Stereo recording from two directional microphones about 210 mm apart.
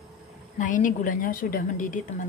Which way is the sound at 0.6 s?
35° left (ahead or behind).